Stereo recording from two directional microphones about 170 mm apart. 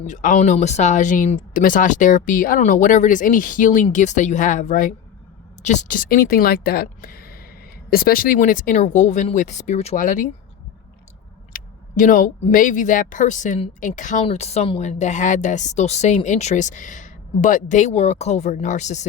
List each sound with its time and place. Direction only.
0.0 s speech: 50° left (ahead or behind)
11.5 s speech: 50° left (ahead or behind)